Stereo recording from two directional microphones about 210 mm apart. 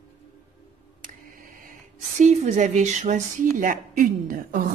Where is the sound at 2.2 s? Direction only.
35° right (ahead or behind).